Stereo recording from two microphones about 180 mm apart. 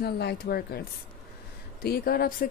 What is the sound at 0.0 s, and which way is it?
A woman's voice, 65° left (ahead or behind).